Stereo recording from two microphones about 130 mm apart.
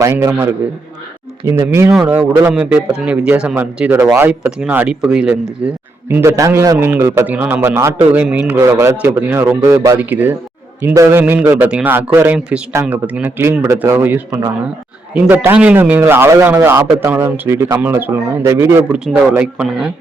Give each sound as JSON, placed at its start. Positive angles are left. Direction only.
{"t": 0.0, "sound": "a man's voice", "side_deg": -20}
{"t": 1.6, "sound": "a man's voice", "side_deg": -20}
{"t": 1.9, "sound": "a man's voice", "side_deg": -5}
{"t": 6.1, "sound": "a man's voice", "side_deg": -20}
{"t": 10.0, "sound": "a man's voice", "side_deg": -15}
{"t": 17.1, "sound": "a man's voice", "side_deg": -15}
{"t": 18.9, "sound": "a man's voice", "side_deg": -5}